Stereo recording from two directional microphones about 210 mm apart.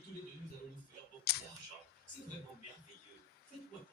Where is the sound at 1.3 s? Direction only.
50° left (ahead or behind).